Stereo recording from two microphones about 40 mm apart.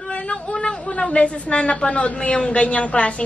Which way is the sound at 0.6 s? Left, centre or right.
Left.